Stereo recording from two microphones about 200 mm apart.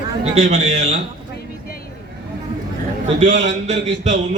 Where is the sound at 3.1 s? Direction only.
35° right (ahead or behind).